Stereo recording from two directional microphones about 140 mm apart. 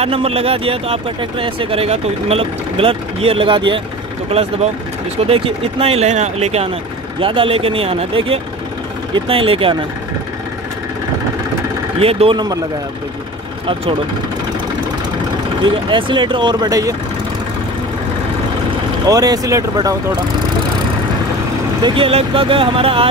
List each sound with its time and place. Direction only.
0.0 s speech: 45° right (ahead or behind)
7.2 s speech: 40° right (ahead or behind)
12.0 s speech: 45° right (ahead or behind)
15.6 s speech: 35° right (ahead or behind)
19.0 s speech: 25° right (ahead or behind)
21.8 s speech: 40° right (ahead or behind)